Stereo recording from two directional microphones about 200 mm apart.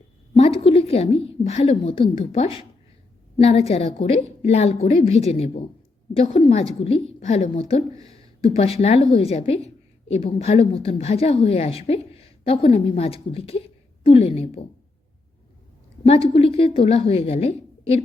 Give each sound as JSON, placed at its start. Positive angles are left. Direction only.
{"t": 0.3, "sound": "a woman's voice", "side_deg": 30}
{"t": 16.0, "sound": "a woman's voice", "side_deg": 30}